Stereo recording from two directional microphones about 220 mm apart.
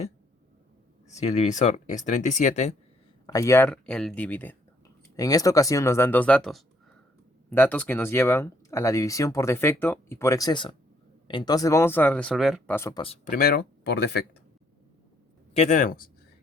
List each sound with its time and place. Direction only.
1.0 s speech: 30° left (ahead or behind)
3.2 s speech: 15° left (ahead or behind)
13.0 s speech: 25° left (ahead or behind)
13.3 s speech: 45° left (ahead or behind)
15.5 s speech: 30° left (ahead or behind)